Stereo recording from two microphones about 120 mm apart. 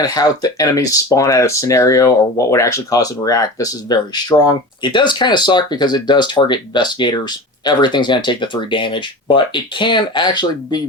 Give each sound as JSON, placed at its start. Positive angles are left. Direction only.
{"t": 0.0, "sound": "speech", "side_deg": 30}